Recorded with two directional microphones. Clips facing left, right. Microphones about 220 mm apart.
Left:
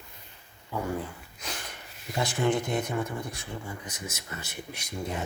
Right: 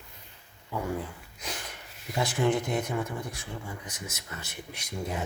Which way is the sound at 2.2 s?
5° right (ahead or behind).